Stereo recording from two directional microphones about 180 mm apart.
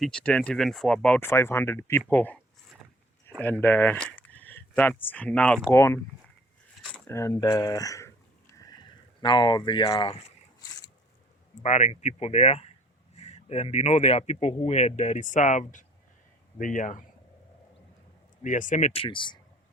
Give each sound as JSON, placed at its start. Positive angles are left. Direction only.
{"t": 0.0, "sound": "speech", "side_deg": 5}
{"t": 3.4, "sound": "speech", "side_deg": 10}
{"t": 8.5, "sound": "a sound", "side_deg": 20}
{"t": 11.6, "sound": "a man's voice", "side_deg": 40}
{"t": 18.4, "sound": "speech", "side_deg": 45}
{"t": 19.0, "sound": "speech", "side_deg": 25}